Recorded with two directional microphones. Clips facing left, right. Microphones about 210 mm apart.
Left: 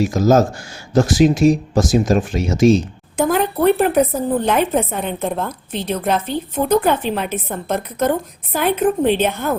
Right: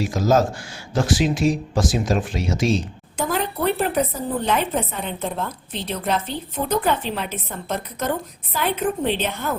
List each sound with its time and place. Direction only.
0.0 s speech: 45° left (ahead or behind)